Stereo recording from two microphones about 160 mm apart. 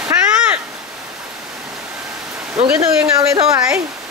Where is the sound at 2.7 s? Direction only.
20° right (ahead or behind).